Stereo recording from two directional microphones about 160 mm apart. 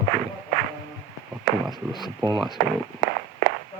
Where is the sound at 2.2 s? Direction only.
25° right (ahead or behind).